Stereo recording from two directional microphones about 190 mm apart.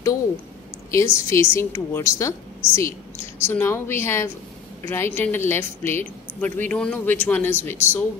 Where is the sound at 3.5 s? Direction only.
15° left (ahead or behind).